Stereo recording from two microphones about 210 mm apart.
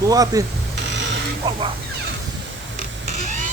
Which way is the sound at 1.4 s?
20° right (ahead or behind).